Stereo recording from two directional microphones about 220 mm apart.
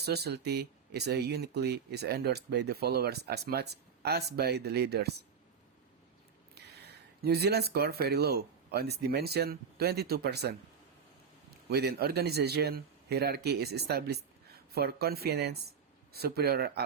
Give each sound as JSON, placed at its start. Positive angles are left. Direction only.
{"t": 0.0, "sound": "speech", "side_deg": -45}
{"t": 7.2, "sound": "speech", "side_deg": -45}
{"t": 11.7, "sound": "speech", "side_deg": -45}